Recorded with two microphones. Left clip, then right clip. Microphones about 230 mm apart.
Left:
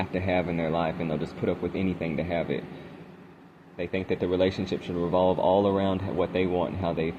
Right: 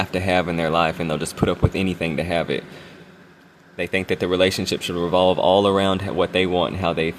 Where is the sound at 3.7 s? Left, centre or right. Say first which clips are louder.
Right 7 dB; right.